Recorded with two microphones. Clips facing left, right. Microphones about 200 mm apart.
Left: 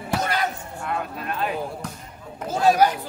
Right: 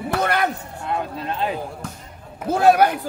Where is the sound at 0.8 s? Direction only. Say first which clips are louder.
Right 3 dB; 25° right (ahead or behind).